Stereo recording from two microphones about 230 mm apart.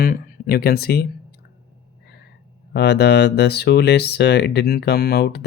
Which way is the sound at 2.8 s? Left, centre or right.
Left.